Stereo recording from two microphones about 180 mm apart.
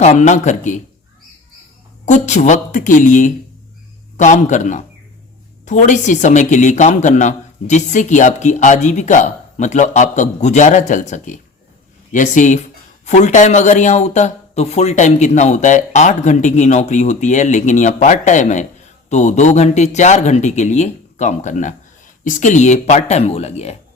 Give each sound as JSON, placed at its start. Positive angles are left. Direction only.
{"t": 0.0, "sound": "speech", "side_deg": 40}
{"t": 2.0, "sound": "speech", "side_deg": 40}